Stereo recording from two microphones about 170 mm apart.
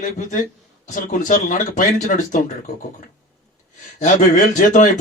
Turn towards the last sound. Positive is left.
turn(degrees=50)  # may be behind; listen again after turning